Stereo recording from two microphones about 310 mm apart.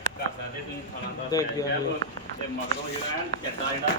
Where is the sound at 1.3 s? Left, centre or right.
Centre.